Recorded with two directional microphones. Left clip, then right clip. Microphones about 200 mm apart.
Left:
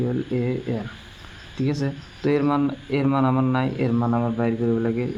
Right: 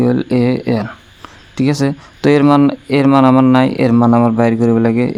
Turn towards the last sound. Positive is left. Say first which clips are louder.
# right 10 dB
turn(degrees=-55)  # may be behind; listen again after turning